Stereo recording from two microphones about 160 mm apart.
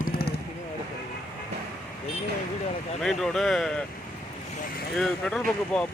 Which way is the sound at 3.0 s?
Centre (ahead or behind).